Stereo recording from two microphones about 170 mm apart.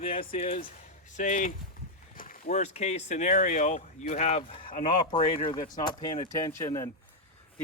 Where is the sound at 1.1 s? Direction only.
50° left (ahead or behind).